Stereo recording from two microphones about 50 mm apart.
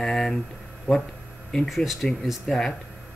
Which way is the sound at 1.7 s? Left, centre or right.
Centre.